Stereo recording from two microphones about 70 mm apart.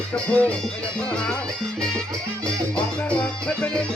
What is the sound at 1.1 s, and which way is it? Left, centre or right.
Music, centre.